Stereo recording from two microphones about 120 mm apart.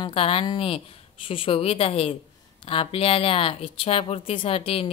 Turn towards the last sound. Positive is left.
turn(degrees=55)  # may be behind; listen again after turning